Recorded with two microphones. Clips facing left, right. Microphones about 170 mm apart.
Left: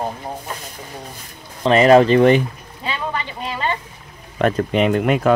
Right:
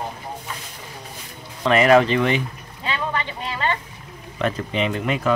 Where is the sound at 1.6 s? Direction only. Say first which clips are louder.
Left 4 dB; 30° left (ahead or behind).